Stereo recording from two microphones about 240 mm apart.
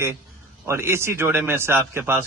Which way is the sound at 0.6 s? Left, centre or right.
Centre.